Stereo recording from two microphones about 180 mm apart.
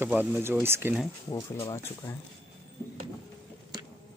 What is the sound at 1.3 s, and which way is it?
Speech, 15° left (ahead or behind).